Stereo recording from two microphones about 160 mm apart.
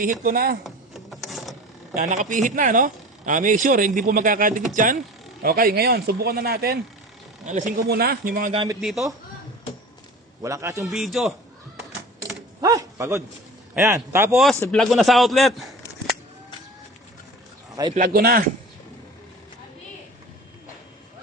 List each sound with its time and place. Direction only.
0.0 s a man's voice: 60° right (ahead or behind)
0.6 s a sound: centre (ahead or behind)
2.0 s a man's voice: 50° right (ahead or behind); by 6.7 s 70° right (ahead or behind)
7.4 s a man's voice: 55° right (ahead or behind)
8.8 s speech: centre (ahead or behind)
10.4 s a man's voice: 20° right (ahead or behind)
10.8 s speech: centre (ahead or behind)
12.6 s speech: 20° right (ahead or behind)
14.6 s a man's voice: 5° left (ahead or behind)
17.9 s a man's voice: 65° right (ahead or behind)